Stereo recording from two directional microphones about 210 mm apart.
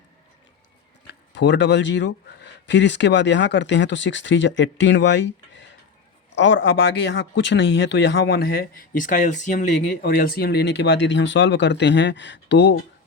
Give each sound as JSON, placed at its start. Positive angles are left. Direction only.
{"t": 1.0, "sound": "speech", "side_deg": 55}